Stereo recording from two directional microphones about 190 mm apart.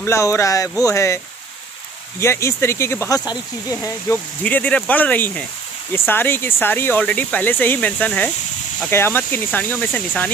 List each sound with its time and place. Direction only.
0.0 s speech: 15° left (ahead or behind)